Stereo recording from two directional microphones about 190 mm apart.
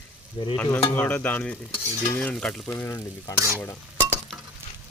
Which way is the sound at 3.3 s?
15° right (ahead or behind).